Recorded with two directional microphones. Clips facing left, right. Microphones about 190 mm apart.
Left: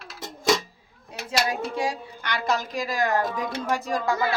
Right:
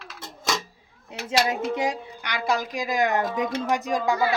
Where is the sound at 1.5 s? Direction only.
20° right (ahead or behind).